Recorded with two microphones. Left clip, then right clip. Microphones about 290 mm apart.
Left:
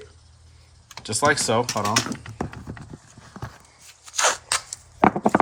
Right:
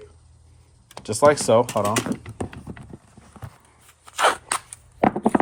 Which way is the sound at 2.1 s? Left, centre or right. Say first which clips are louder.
Right 4 dB; right.